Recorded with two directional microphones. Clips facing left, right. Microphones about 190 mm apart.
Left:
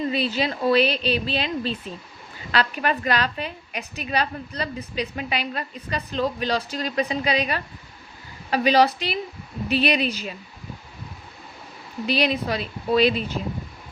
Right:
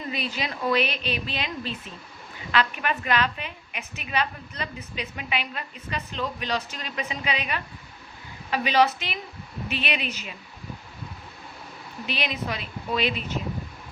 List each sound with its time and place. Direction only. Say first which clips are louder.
0.1 s a woman's voice: left 7 dB; 30° left (ahead or behind)
12.0 s a woman's voice: left 7 dB; 35° left (ahead or behind)